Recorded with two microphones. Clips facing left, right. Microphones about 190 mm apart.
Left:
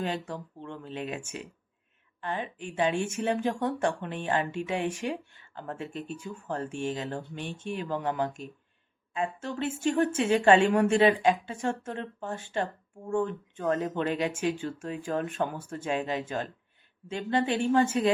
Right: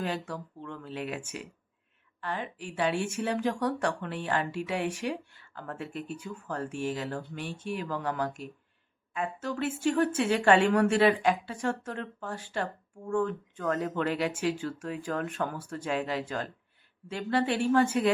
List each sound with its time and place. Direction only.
0.0 s speech: 20° left (ahead or behind)
2.2 s speech: 20° left (ahead or behind)